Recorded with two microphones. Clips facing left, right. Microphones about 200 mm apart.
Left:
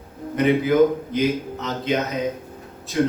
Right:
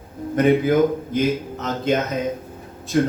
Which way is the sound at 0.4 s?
50° right (ahead or behind).